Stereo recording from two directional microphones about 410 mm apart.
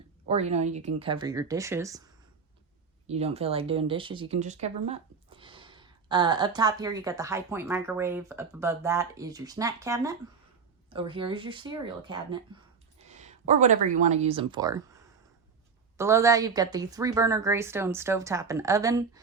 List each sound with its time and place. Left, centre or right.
0.3 s speech: centre
3.1 s speech: centre
16.0 s speech: centre